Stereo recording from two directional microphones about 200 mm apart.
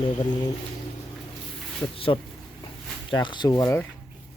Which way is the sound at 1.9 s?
25° left (ahead or behind).